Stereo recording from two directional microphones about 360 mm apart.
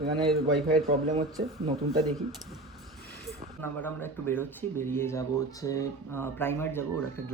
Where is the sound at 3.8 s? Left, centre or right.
Centre.